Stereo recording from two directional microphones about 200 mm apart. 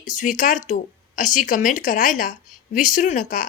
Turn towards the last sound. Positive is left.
turn(degrees=40)  # may be behind; listen again after turning